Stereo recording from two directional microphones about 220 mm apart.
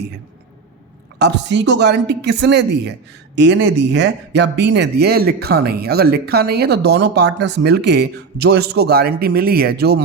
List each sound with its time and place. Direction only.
1.2 s speech: 50° right (ahead or behind)